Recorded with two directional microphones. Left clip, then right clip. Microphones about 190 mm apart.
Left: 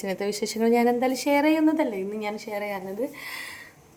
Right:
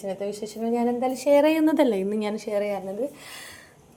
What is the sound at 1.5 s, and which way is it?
A woman's voice, 30° right (ahead or behind).